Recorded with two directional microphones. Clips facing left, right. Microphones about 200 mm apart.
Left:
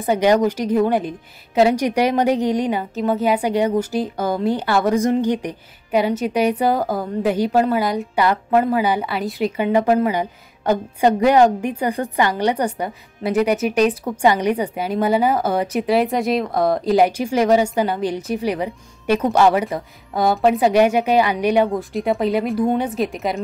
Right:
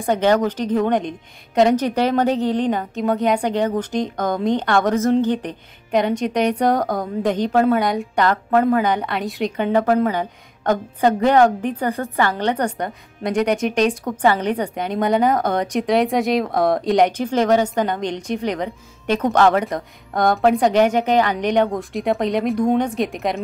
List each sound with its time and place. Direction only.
0.0 s a woman's voice: 10° left (ahead or behind)